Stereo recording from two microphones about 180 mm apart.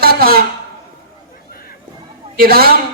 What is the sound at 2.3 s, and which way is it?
Speech, 55° right (ahead or behind).